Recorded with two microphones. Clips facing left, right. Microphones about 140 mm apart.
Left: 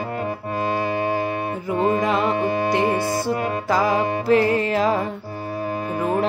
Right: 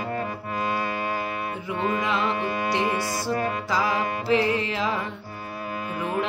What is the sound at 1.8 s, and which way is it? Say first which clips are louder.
Music: left 5 dB; 40° left (ahead or behind).